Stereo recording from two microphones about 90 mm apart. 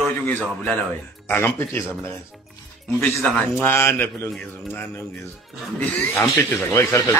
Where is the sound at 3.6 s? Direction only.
25° left (ahead or behind).